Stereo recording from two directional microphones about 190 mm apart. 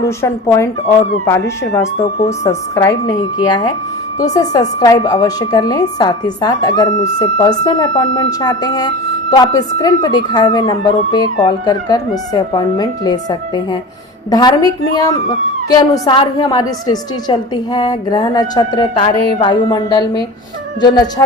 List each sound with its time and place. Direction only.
0.0 s speech: 15° left (ahead or behind)
2.0 s a woman's voice: 20° left (ahead or behind)
14.3 s a woman's voice: 20° left (ahead or behind)